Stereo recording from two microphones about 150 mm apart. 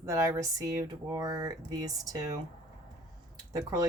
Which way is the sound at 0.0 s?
20° right (ahead or behind).